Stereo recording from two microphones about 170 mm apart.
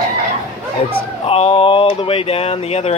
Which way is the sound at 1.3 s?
35° left (ahead or behind).